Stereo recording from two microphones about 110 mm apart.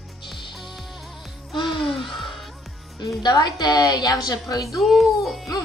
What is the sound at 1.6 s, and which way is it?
Music, 45° left (ahead or behind).